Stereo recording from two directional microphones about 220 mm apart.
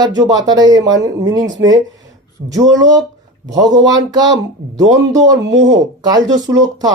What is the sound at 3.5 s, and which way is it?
Speech, 15° right (ahead or behind).